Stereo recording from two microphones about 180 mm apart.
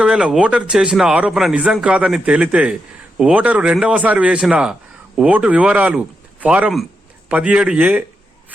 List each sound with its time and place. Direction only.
0.0 s a man's voice: 5° right (ahead or behind)